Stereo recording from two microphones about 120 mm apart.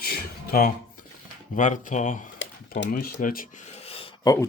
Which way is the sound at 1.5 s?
90° left.